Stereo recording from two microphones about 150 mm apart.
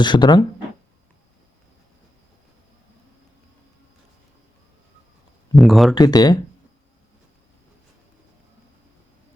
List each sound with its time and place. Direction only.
0.0 s speech: 30° left (ahead or behind)
5.5 s speech: centre (ahead or behind)
5.9 s speech: 25° left (ahead or behind)